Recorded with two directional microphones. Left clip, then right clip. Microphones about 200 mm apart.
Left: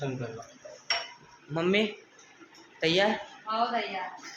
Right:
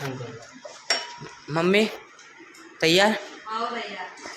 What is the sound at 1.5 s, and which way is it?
Speech, 20° right (ahead or behind).